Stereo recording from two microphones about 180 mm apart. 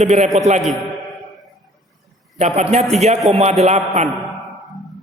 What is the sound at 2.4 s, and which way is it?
A woman's voice, 40° right (ahead or behind).